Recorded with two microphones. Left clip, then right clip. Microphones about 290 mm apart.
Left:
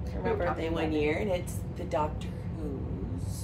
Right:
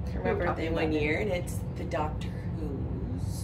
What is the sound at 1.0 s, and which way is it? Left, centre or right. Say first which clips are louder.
Speech: even; centre.